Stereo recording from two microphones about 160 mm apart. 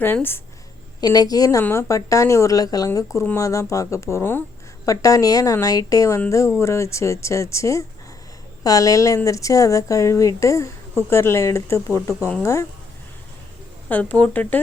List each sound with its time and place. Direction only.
0.0 s speech: 10° left (ahead or behind)
1.0 s speech: 25° left (ahead or behind)
13.8 s speech: 10° left (ahead or behind)